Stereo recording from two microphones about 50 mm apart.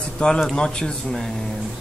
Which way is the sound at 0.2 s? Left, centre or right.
Left.